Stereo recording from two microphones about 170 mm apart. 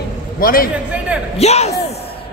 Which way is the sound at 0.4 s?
60° left (ahead or behind).